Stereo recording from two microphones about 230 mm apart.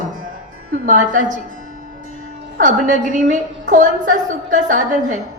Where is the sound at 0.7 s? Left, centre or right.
Right.